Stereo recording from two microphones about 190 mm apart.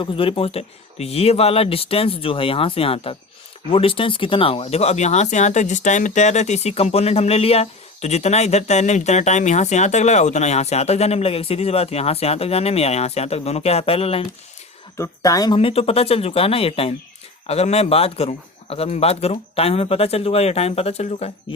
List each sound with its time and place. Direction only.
0.0 s speech: 30° left (ahead or behind)
14.9 s speech: 15° left (ahead or behind)
15.5 s speech: 30° left (ahead or behind)